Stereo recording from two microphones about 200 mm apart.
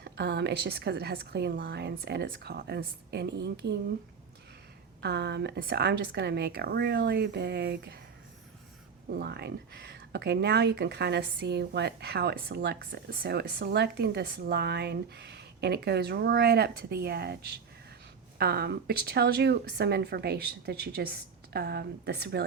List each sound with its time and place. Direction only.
0.0 s speech: 55° right (ahead or behind)
4.9 s a woman's voice: 55° right (ahead or behind)
9.1 s a woman's voice: 55° right (ahead or behind)